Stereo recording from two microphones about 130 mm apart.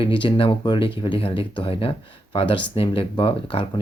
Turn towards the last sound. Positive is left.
turn(degrees=40)  # may be behind; listen again after turning